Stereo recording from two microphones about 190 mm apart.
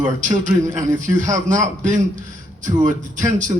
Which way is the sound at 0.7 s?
40° right (ahead or behind).